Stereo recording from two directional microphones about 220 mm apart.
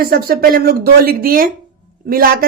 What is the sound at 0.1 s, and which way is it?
Speech, 45° right (ahead or behind).